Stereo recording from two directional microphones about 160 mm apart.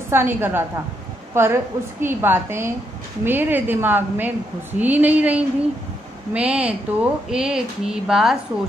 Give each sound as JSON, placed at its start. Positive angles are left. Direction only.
{"t": 0.1, "sound": "a woman's voice", "side_deg": -15}